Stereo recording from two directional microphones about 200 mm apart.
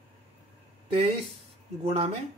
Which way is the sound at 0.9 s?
30° right (ahead or behind).